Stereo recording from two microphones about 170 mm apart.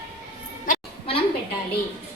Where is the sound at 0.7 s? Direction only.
55° left (ahead or behind).